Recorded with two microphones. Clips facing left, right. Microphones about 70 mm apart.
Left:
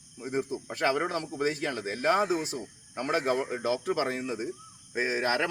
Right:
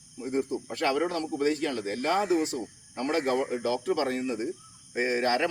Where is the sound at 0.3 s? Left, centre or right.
Centre.